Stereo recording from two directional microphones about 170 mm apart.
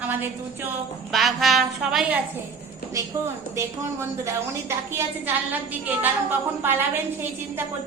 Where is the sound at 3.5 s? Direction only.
15° right (ahead or behind).